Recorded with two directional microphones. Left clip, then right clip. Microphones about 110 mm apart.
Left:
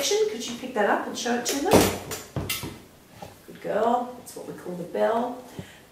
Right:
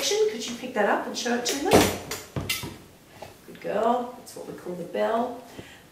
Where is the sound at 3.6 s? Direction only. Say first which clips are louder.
Left 1 dB; 10° right (ahead or behind).